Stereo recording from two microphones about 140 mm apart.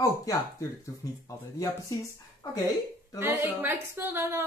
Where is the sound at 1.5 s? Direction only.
25° left (ahead or behind).